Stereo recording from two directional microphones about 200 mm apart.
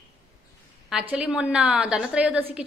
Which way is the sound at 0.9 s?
5° right (ahead or behind).